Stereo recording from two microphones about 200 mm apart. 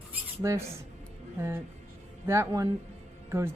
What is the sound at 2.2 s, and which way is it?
Speech, 15° right (ahead or behind).